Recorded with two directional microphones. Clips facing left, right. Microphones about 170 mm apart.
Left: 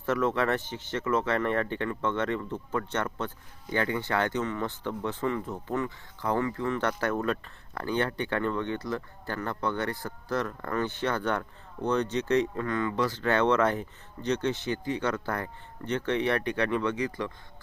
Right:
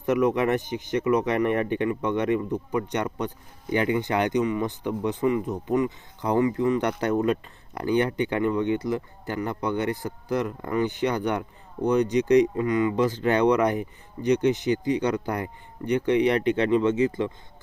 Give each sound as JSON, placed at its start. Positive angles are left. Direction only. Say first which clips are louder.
{"t": 0.0, "sound": "speech", "louder": "right 5 dB", "side_deg": -15}